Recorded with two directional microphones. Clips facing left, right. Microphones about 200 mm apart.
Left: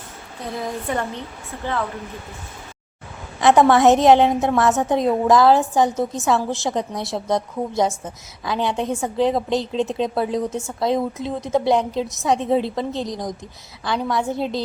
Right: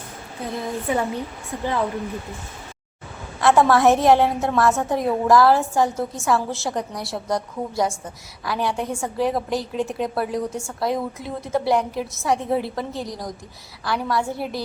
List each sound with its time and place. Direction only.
0.5 s a woman's voice: 5° right (ahead or behind)
3.4 s a woman's voice: 20° left (ahead or behind)